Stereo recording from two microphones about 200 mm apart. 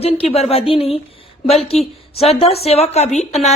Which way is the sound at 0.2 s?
30° left (ahead or behind).